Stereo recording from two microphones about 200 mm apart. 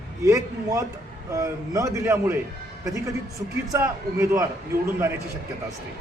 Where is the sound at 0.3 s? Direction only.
15° right (ahead or behind).